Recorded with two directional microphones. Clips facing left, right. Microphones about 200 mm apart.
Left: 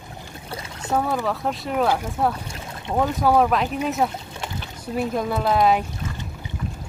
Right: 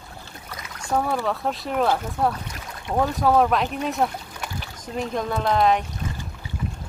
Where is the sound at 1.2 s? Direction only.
Centre (ahead or behind).